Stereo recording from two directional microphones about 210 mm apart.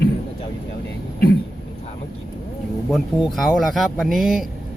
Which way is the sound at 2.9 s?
Centre (ahead or behind).